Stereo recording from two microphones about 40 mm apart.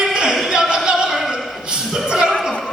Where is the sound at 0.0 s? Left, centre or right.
Centre.